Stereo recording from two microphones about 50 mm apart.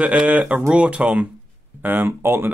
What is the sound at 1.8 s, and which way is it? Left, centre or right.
Speech, right.